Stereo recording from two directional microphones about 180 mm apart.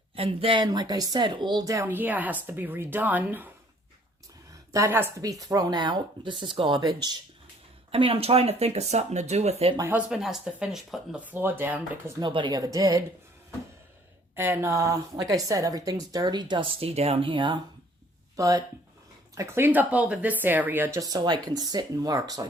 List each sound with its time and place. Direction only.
0.2 s speech: 30° right (ahead or behind); by 3.5 s 10° right (ahead or behind)
4.7 s a woman's voice: 15° right (ahead or behind); by 9.7 s 35° right (ahead or behind)
9.7 s speech: 15° right (ahead or behind)
10.1 s a woman's voice: centre (ahead or behind); by 13.0 s 20° right (ahead or behind)
14.3 s a woman's voice: 10° right (ahead or behind)